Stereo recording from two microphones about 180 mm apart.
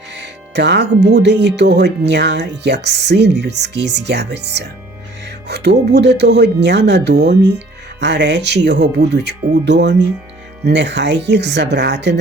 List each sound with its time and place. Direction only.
0.2 s speech: 75° right (ahead or behind)